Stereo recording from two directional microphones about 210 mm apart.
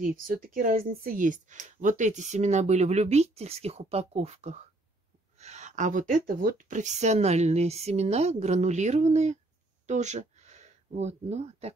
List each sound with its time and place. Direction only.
0.0 s speech: 40° right (ahead or behind)